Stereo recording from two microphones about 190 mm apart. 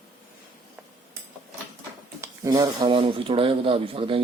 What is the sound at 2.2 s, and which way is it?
Speech, 20° right (ahead or behind).